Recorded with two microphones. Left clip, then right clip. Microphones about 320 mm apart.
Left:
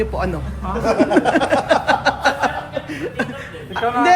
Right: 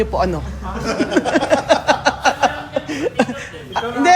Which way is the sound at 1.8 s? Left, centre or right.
Centre.